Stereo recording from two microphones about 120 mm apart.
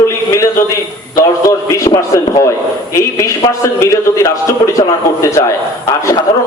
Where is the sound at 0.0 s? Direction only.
25° left (ahead or behind).